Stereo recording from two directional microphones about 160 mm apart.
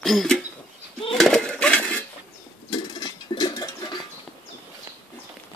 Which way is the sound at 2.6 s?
30° left (ahead or behind).